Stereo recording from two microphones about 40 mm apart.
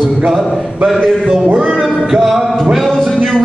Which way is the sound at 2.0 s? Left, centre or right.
Centre.